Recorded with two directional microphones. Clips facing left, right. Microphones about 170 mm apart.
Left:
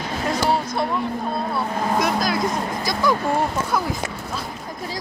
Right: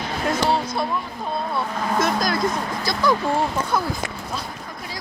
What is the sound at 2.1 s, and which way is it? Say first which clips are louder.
Speech: left 1 dB; 5° left (ahead or behind).